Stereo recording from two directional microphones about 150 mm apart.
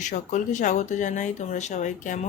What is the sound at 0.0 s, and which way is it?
Speech, 55° left (ahead or behind).